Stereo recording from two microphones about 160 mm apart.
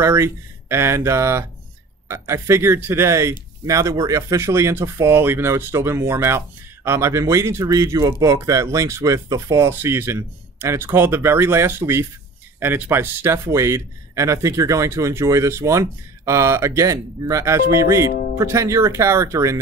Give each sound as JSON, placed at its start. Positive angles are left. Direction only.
{"t": 0.0, "sound": "speech", "side_deg": -15}